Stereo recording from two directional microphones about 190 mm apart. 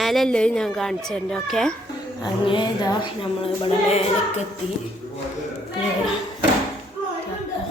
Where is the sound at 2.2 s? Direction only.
25° left (ahead or behind).